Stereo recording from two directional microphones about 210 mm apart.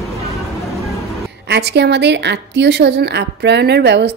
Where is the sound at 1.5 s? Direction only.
50° right (ahead or behind).